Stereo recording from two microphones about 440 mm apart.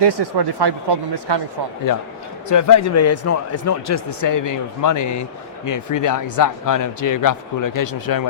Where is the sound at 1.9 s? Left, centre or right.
Left.